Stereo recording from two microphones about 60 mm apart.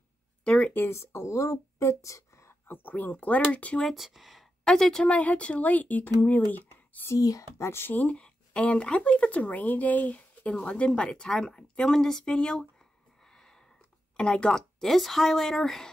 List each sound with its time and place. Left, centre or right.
0.4 s speech: centre
0.8 s speech: left
2.7 s speech: left
3.8 s speech: centre
4.6 s speech: centre
5.0 s speech: left
7.2 s speech: left
7.5 s speech: left
7.9 s speech: left
13.3 s a sound: centre
14.1 s speech: centre